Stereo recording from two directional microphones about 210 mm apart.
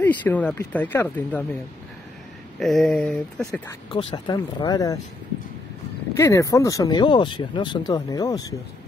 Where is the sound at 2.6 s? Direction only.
Centre (ahead or behind).